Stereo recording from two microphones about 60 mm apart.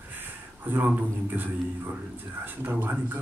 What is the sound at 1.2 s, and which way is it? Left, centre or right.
A man's voice, right.